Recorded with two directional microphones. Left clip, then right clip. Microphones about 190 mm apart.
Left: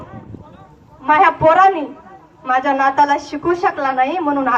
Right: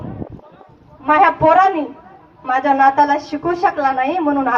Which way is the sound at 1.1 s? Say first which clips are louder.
Even; 45° right (ahead or behind).